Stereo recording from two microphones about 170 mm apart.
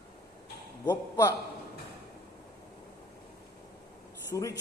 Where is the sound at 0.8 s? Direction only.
20° left (ahead or behind).